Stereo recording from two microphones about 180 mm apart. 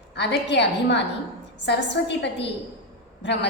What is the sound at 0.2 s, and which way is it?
A woman's voice, 75° left (ahead or behind).